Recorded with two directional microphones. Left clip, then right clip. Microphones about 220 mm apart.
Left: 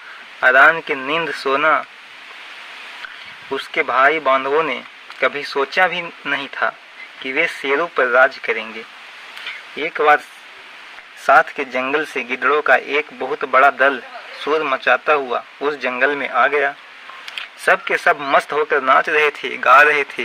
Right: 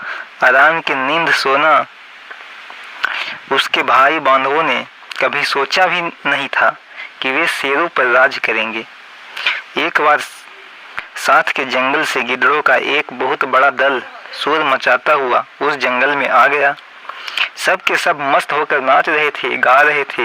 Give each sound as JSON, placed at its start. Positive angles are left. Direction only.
{"t": 0.3, "sound": "speech", "side_deg": -45}
{"t": 3.5, "sound": "speech", "side_deg": -45}
{"t": 9.4, "sound": "a sound", "side_deg": -50}
{"t": 11.3, "sound": "speech", "side_deg": -45}